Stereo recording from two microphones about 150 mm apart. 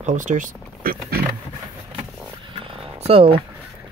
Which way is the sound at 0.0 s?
55° right (ahead or behind).